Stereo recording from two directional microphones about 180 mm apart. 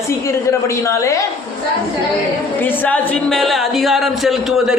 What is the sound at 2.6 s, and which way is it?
Speech, 5° left (ahead or behind).